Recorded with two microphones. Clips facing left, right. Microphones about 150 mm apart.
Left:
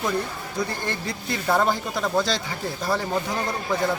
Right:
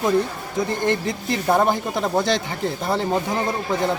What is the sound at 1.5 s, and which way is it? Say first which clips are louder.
Speech: right 3 dB; 20° right (ahead or behind).